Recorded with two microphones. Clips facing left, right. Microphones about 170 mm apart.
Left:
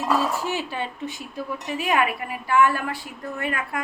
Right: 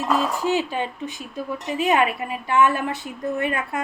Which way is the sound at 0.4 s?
15° right (ahead or behind).